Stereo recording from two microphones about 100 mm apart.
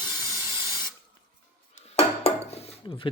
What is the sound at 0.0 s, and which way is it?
Spray, 35° left (ahead or behind).